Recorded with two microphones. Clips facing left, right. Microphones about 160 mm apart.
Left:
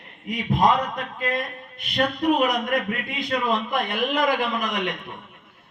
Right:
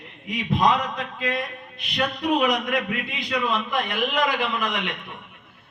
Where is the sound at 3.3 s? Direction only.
50° left (ahead or behind).